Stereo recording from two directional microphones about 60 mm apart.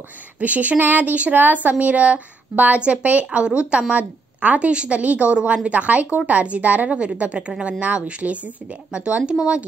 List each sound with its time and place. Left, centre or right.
0.4 s a woman's voice: right